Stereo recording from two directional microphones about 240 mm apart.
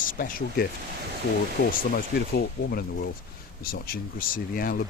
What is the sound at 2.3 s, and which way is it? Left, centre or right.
Speech, left.